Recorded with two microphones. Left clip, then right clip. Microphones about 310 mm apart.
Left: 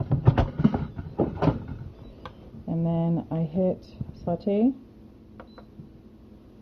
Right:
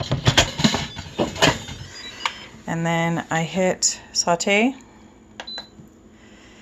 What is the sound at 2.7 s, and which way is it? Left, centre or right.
Speech, right.